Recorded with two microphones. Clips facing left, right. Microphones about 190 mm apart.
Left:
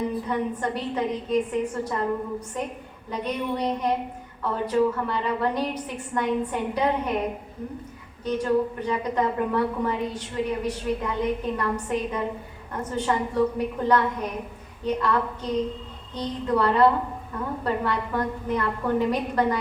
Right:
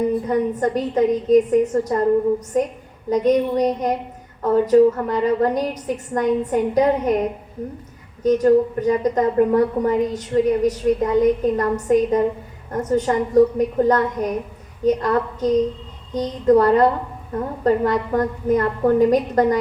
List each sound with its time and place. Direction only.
0.3 s a woman's voice: 40° right (ahead or behind)
3.1 s a woman's voice: 40° right (ahead or behind)
8.2 s a woman's voice: 40° right (ahead or behind)